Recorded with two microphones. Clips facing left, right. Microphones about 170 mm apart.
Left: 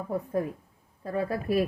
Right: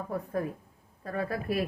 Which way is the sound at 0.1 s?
20° left (ahead or behind).